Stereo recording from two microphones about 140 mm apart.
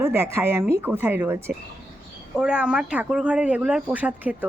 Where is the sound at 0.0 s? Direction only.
20° right (ahead or behind).